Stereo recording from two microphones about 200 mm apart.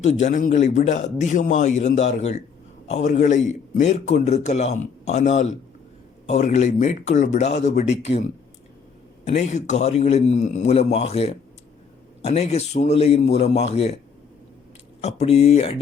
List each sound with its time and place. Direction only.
0.0 s a man's voice: 35° left (ahead or behind)
9.2 s a man's voice: 30° left (ahead or behind)
15.0 s a man's voice: 30° left (ahead or behind)